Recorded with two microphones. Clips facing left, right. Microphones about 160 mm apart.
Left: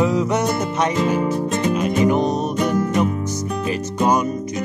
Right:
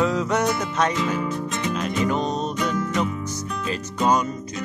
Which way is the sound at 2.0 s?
15° left (ahead or behind).